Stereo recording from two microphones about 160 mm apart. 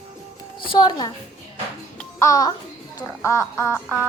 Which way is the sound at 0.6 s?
30° left (ahead or behind).